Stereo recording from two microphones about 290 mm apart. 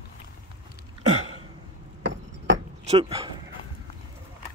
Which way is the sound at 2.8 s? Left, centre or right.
Centre.